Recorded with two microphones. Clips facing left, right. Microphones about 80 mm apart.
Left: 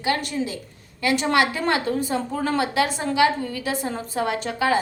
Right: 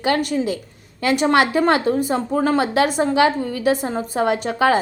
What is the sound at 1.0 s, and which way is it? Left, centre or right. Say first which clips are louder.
A woman's voice: right 4 dB; right.